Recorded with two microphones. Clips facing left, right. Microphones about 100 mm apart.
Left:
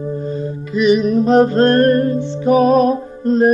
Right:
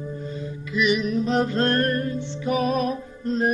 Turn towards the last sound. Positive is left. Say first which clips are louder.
# left 10 dB
turn(degrees=45)  # may be behind; listen again after turning